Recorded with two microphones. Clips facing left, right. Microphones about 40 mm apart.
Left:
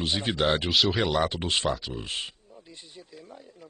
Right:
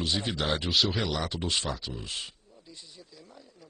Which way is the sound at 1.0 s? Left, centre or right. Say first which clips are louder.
Left 5 dB; left.